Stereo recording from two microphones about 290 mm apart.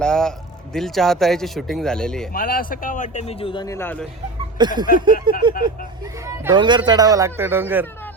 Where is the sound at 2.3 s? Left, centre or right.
Left; by 4.0 s centre.